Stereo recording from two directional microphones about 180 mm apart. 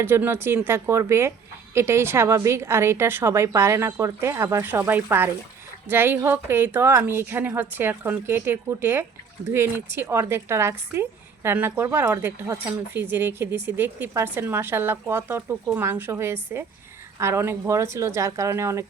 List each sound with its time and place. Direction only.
0.0 s a woman's voice: 10° right (ahead or behind)